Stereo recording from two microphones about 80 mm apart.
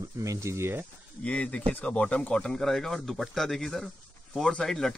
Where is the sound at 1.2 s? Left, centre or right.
Centre.